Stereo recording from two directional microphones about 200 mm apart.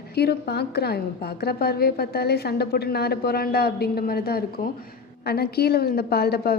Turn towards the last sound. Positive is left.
turn(degrees=50)  # may be behind; listen again after turning